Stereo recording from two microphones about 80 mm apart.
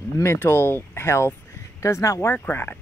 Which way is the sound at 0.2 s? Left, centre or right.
Left.